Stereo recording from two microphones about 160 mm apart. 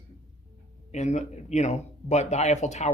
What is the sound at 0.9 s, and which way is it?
Speech, 45° left (ahead or behind).